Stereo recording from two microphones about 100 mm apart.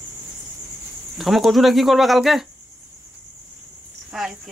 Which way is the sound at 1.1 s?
Centre (ahead or behind).